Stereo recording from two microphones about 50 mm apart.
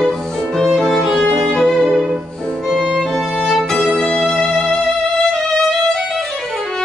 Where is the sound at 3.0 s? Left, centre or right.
Centre.